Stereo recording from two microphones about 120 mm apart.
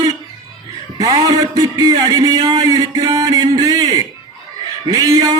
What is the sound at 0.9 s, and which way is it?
A man's voice, 30° right (ahead or behind).